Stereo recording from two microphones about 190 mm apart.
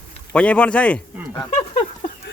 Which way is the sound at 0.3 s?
5° left (ahead or behind).